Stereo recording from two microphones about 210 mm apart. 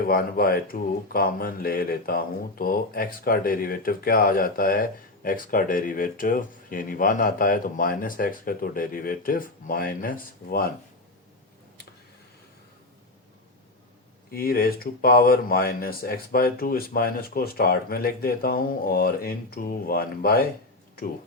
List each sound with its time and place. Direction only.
0.0 s speech: 45° left (ahead or behind)
14.3 s speech: 45° left (ahead or behind)